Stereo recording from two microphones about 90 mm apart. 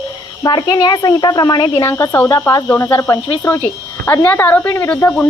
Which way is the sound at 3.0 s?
35° left (ahead or behind).